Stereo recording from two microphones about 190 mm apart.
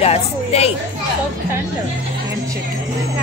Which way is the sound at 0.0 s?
35° left (ahead or behind).